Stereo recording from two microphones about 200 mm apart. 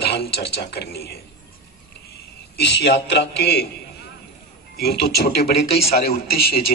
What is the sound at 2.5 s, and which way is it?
Speech, 55° left (ahead or behind).